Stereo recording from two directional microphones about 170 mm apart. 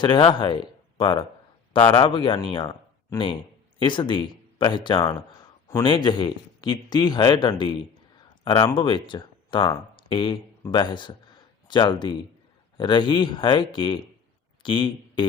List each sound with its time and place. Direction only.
0.0 s speech: 30° left (ahead or behind)